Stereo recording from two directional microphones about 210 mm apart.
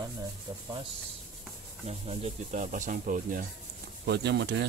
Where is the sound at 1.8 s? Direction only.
30° right (ahead or behind).